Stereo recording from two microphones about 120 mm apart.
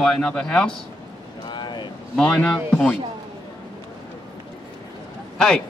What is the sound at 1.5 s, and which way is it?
Vehicle, 40° left (ahead or behind).